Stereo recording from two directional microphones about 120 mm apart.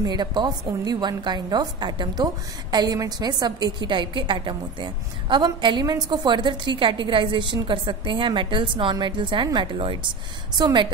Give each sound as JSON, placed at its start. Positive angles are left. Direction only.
{"t": 0.0, "sound": "a woman's voice", "side_deg": -35}